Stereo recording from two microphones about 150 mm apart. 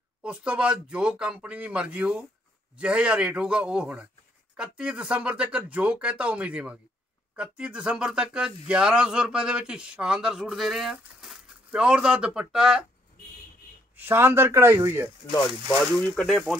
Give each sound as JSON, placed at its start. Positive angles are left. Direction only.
{"t": 0.2, "sound": "speech", "side_deg": -5}
{"t": 13.9, "sound": "speech", "side_deg": -15}
{"t": 16.2, "sound": "speech", "side_deg": 0}